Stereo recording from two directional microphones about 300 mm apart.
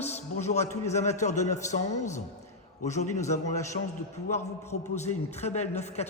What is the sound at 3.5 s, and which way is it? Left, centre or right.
Speech, centre.